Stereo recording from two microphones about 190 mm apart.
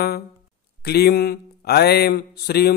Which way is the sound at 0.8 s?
55° left (ahead or behind).